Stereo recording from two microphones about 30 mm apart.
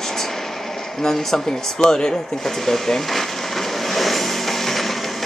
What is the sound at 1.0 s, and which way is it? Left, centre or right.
Speech, left.